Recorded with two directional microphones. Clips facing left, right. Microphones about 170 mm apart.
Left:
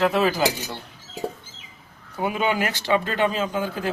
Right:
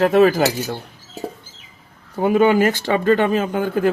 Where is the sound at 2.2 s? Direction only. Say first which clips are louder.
Right 9 dB; 45° right (ahead or behind).